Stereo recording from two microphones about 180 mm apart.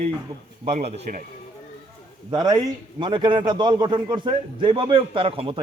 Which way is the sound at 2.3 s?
25° right (ahead or behind).